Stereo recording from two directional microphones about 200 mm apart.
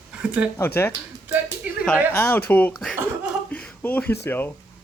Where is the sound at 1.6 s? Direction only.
10° right (ahead or behind).